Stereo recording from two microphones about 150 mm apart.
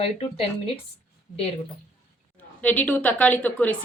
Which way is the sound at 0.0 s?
40° left (ahead or behind).